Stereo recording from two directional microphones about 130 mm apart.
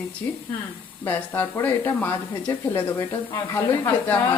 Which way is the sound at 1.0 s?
15° left (ahead or behind).